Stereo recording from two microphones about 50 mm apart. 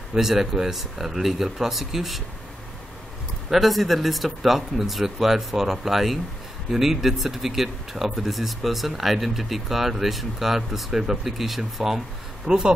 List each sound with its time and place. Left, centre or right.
0.1 s speech: centre
3.4 s speech: centre
12.4 s speech: centre